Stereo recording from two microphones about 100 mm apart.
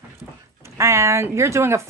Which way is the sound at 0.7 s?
30° right (ahead or behind).